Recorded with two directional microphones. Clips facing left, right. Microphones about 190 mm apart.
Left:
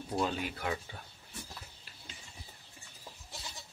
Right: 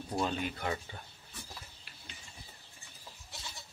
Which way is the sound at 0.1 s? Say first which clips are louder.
Even; 5° left (ahead or behind).